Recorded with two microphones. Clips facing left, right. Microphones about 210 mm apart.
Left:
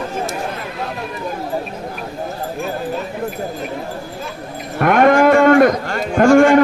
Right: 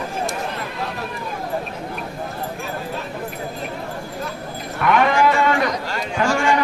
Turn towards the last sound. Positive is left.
turn(degrees=55)  # may be behind; listen again after turning